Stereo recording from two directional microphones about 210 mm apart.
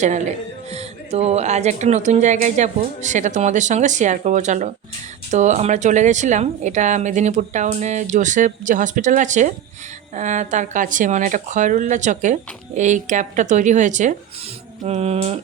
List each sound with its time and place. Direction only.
0.0 s a woman's voice: 35° right (ahead or behind)